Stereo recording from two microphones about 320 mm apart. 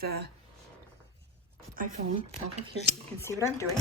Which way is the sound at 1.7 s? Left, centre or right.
Right.